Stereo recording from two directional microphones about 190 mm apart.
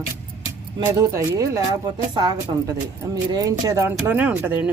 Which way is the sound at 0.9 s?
15° right (ahead or behind).